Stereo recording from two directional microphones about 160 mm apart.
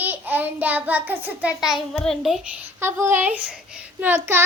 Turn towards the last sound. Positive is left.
turn(degrees=-15)  # may be behind; listen again after turning